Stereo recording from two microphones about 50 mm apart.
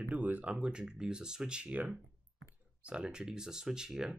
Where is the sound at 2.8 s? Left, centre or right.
Right.